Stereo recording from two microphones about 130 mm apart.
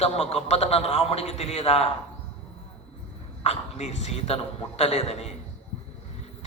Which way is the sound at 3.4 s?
55° left (ahead or behind).